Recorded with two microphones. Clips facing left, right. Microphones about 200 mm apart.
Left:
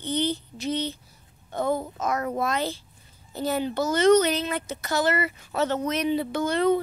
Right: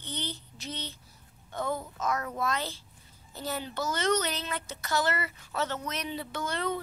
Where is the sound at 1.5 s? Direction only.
40° left (ahead or behind).